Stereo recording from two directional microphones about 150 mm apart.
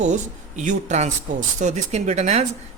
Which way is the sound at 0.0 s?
55° right (ahead or behind).